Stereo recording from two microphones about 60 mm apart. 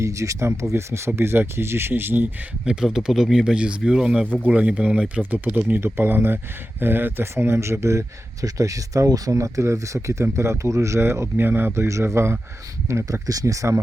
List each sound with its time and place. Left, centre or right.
0.0 s speech: right
2.6 s speech: centre
4.3 s speech: right
5.8 s speech: right
8.4 s speech: right
11.7 s speech: right
13.2 s speech: right